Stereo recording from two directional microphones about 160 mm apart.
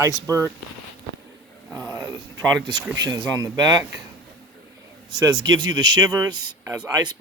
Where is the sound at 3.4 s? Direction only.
15° right (ahead or behind).